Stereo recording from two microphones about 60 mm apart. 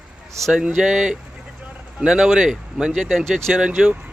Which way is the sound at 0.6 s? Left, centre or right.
Centre.